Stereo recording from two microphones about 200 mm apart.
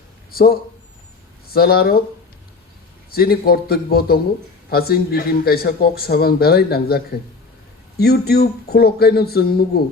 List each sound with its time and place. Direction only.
0.3 s a man's voice: 50° left (ahead or behind)
3.1 s a man's voice: 50° left (ahead or behind)